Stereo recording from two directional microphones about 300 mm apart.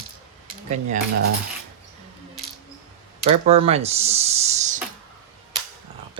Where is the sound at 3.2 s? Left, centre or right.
Centre.